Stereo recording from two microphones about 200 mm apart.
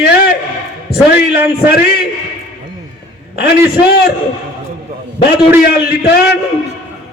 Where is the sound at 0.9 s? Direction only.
50° left (ahead or behind).